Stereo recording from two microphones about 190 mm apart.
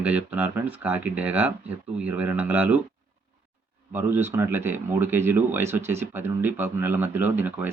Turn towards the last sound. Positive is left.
turn(degrees=-10)  # may be behind; listen again after turning